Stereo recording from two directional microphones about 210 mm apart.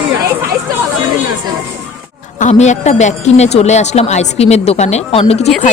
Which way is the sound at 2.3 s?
35° left (ahead or behind).